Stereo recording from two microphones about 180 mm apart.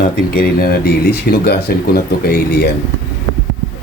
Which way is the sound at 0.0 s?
55° left (ahead or behind).